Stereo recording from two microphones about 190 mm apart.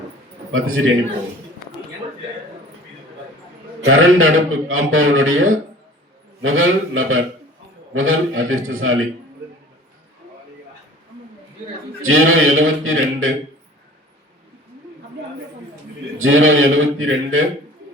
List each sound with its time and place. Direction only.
0.5 s a man's voice: 90° right
3.8 s a man's voice: 90° right
12.0 s a man's voice: 90° right
16.1 s a man's voice: 90° right